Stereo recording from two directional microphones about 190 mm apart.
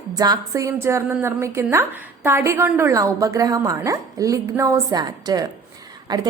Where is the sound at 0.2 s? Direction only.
20° right (ahead or behind).